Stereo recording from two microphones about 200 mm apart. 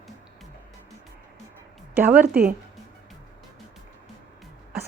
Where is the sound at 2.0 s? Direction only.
10° right (ahead or behind).